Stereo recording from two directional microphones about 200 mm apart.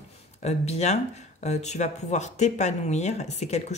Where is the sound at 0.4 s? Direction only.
35° left (ahead or behind).